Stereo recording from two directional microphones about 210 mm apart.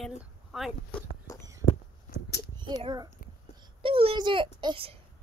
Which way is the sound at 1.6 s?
75° left (ahead or behind).